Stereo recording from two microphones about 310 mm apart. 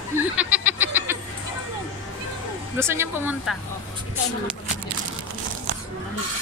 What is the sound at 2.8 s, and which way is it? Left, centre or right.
Speech, centre.